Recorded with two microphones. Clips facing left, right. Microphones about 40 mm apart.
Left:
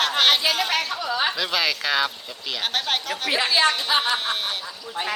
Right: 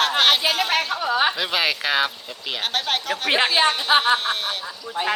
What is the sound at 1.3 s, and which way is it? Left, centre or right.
Speech, centre.